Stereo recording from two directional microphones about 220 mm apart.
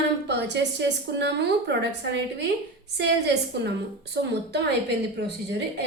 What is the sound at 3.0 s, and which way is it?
Speech, 50° right (ahead or behind).